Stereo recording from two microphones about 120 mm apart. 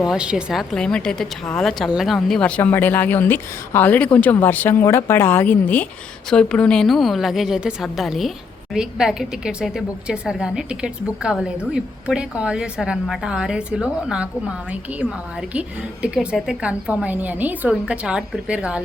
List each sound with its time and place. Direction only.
0.0 s a woman's voice: 5° right (ahead or behind)